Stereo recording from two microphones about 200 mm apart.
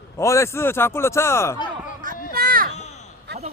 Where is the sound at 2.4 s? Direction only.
45° right (ahead or behind).